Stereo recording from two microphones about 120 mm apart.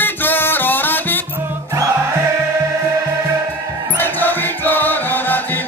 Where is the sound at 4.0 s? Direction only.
15° left (ahead or behind).